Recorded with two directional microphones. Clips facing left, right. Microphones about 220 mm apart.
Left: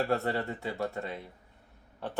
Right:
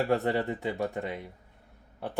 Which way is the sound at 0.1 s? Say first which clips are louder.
Right 3 dB; 20° right (ahead or behind).